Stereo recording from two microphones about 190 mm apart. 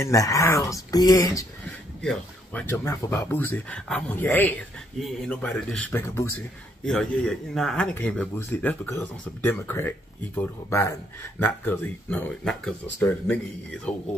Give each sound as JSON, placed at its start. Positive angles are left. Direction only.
{"t": 0.0, "sound": "speech", "side_deg": 15}
{"t": 2.0, "sound": "speech", "side_deg": 5}